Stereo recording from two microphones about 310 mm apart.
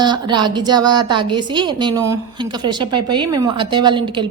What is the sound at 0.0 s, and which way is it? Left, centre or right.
A woman's voice, centre.